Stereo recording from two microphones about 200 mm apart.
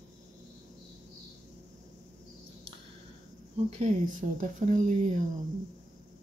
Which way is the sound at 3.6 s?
40° right (ahead or behind).